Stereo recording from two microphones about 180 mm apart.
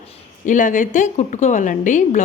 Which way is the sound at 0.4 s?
45° left (ahead or behind).